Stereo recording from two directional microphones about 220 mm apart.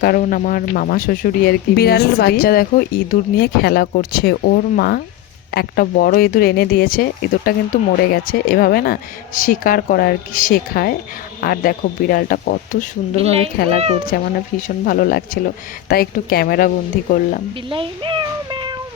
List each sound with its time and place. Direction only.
0.0 s speech: 40° left (ahead or behind)
13.1 s speech: 30° right (ahead or behind)
14.8 s speech: 40° left (ahead or behind)
17.7 s speech: 25° right (ahead or behind)